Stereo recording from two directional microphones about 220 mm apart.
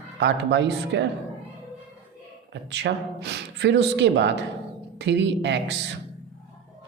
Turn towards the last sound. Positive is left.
turn(degrees=-55)  # may be behind; listen again after turning